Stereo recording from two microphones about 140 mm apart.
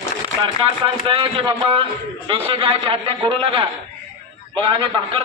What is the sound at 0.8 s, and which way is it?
A man's voice, 40° right (ahead or behind).